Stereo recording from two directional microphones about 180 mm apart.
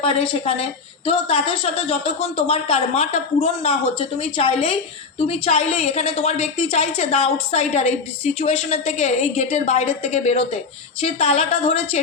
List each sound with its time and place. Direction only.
0.0 s a woman's voice: 30° left (ahead or behind)